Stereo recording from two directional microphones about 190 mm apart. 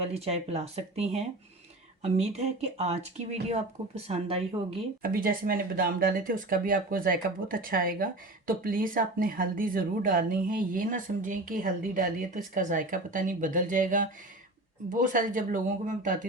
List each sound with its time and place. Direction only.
0.0 s speech: 35° right (ahead or behind)
5.0 s speech: 50° right (ahead or behind)